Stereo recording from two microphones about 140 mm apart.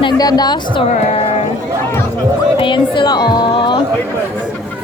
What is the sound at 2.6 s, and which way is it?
Speech, 35° left (ahead or behind).